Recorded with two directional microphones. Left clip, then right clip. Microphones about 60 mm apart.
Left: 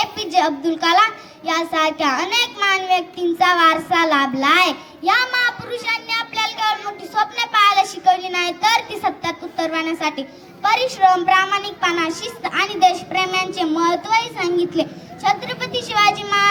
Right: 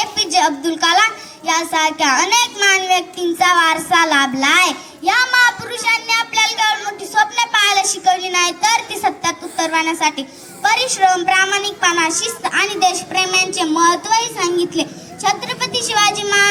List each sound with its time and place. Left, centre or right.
0.0 s a child's voice: right